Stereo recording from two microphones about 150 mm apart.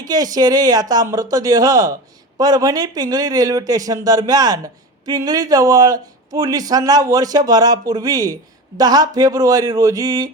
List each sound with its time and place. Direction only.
0.0 s speech: 25° right (ahead or behind)